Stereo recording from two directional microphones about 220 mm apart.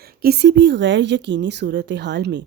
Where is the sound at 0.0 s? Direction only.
45° right (ahead or behind).